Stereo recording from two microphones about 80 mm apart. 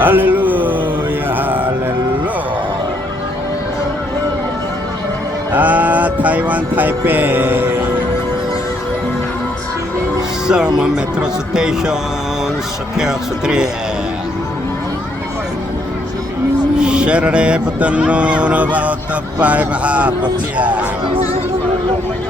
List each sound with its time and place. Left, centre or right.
0.0 s a sound: right
5.5 s music: right
10.4 s speech: centre
13.0 s speech: centre
16.7 s speech: centre